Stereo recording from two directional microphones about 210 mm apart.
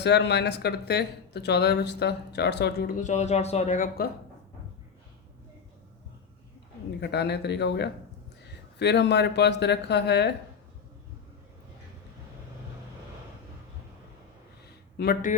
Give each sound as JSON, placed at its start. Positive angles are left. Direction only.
{"t": 0.0, "sound": "speech", "side_deg": 55}
{"t": 7.0, "sound": "speech", "side_deg": 50}
{"t": 14.9, "sound": "speech", "side_deg": 45}